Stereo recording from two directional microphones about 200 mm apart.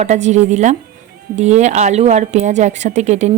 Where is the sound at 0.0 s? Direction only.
35° right (ahead or behind).